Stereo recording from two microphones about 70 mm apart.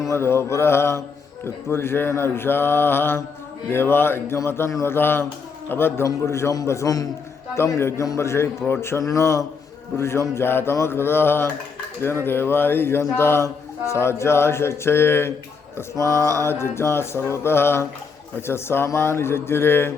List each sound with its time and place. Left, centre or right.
0.0 s a man's voice: left
7.8 s a man's voice: left